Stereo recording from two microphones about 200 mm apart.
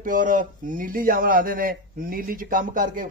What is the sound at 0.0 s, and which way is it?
A man's voice, 40° right (ahead or behind).